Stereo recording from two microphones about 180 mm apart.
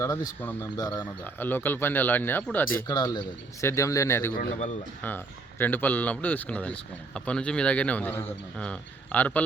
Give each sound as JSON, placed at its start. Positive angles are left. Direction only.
{"t": 0.0, "sound": "speech", "side_deg": 15}
{"t": 2.8, "sound": "speech", "side_deg": 20}